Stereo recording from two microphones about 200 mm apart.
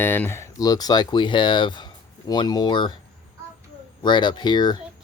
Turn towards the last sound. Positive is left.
turn(degrees=20)  # may be behind; listen again after turning